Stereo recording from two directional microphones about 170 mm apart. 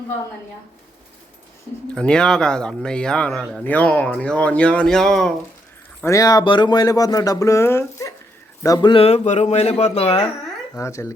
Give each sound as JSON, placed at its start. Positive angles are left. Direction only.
{"t": 2.0, "sound": "speech", "side_deg": 5}
{"t": 6.0, "sound": "speech", "side_deg": 20}
{"t": 10.8, "sound": "speech", "side_deg": 15}